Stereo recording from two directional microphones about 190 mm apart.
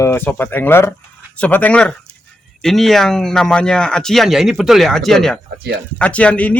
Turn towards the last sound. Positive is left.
turn(degrees=5)  # may be behind; listen again after turning